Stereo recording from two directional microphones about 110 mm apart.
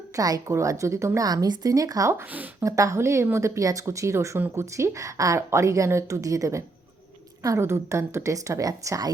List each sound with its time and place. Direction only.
0.2 s a woman's voice: 35° right (ahead or behind)
2.3 s speech: 15° right (ahead or behind)
2.6 s speech: 30° right (ahead or behind)